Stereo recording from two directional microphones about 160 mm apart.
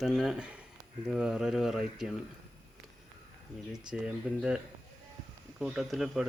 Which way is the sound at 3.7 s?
5° right (ahead or behind).